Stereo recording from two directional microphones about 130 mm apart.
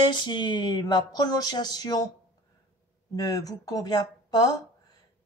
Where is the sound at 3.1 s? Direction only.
30° left (ahead or behind).